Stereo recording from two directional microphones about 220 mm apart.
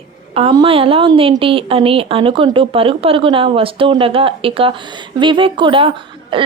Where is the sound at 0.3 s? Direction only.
25° right (ahead or behind).